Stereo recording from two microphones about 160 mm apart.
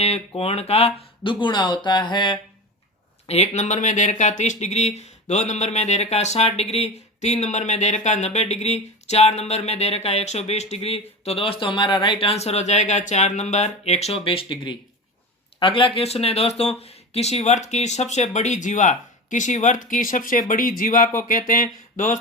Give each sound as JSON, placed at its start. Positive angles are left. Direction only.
{"t": 0.0, "sound": "speech", "side_deg": 40}
{"t": 3.2, "sound": "speech", "side_deg": 40}